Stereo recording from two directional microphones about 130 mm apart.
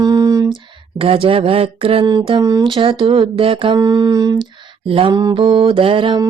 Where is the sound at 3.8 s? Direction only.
30° right (ahead or behind).